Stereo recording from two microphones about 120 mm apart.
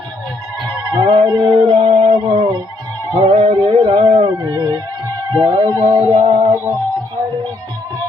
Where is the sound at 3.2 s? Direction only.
55° right (ahead or behind).